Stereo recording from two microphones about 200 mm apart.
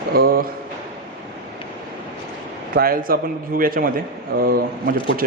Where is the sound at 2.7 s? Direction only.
50° right (ahead or behind).